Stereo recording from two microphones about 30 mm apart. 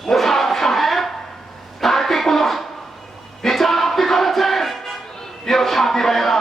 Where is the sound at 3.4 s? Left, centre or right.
Centre.